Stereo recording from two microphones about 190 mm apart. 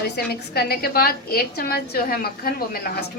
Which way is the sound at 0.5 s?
55° left (ahead or behind).